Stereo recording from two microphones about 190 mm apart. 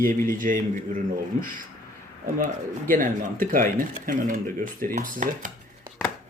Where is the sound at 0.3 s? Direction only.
45° right (ahead or behind).